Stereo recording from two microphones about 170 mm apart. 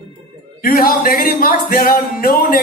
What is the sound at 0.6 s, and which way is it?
A woman's voice, 60° left (ahead or behind).